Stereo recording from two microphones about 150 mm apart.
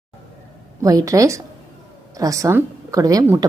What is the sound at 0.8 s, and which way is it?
Speech, 20° right (ahead or behind).